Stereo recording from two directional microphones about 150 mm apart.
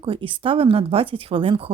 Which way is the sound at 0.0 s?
35° right (ahead or behind).